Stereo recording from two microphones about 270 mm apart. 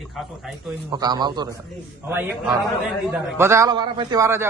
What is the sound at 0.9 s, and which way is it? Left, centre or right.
A man's voice, centre.